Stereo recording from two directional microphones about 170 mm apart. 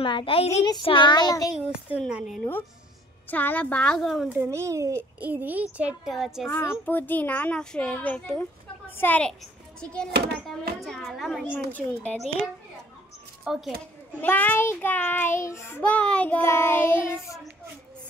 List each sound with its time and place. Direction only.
0.0 s a child's voice: 30° left (ahead or behind)
0.6 s child singing: 25° left (ahead or behind)
1.6 s a woman's voice: 5° right (ahead or behind)
3.3 s child singing: 10° left (ahead or behind)
4.4 s a child's voice: 15° right (ahead or behind); by 6.5 s centre (ahead or behind)
6.9 s child singing: 10° left (ahead or behind)
8.9 s a child's voice: 10° left (ahead or behind)
11.5 s child singing: 10° left (ahead or behind)
13.4 s a sound: 5° right (ahead or behind)
14.2 s child singing: 10° left (ahead or behind)